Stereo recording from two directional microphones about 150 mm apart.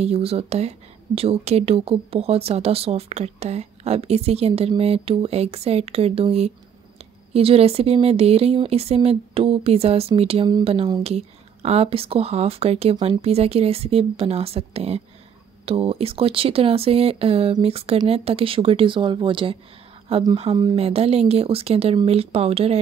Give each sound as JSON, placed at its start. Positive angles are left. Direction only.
{"t": 0.0, "sound": "speech", "side_deg": -45}